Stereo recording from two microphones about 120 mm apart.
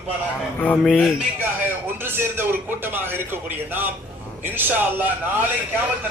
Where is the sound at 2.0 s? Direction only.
20° right (ahead or behind).